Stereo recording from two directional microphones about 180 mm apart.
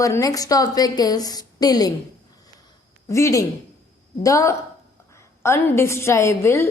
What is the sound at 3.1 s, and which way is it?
A woman's voice, 15° left (ahead or behind).